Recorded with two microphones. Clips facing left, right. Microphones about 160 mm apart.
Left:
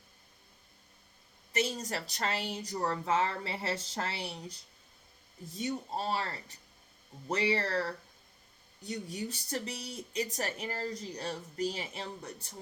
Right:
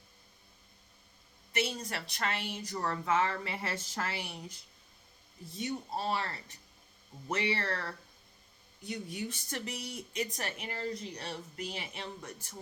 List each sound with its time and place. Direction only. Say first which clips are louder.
1.5 s speech: left 2 dB; 40° left (ahead or behind)
5.5 s speech: left 1 dB; 35° left (ahead or behind)